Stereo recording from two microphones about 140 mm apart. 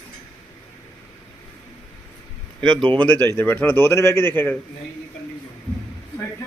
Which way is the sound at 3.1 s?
15° left (ahead or behind).